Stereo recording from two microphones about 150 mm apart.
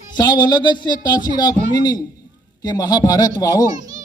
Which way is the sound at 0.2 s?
25° left (ahead or behind).